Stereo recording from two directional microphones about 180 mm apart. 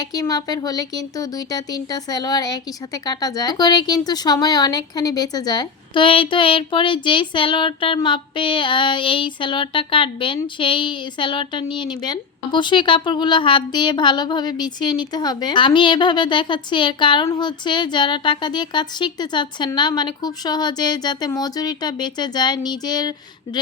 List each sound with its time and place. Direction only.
0.0 s speech: 20° left (ahead or behind)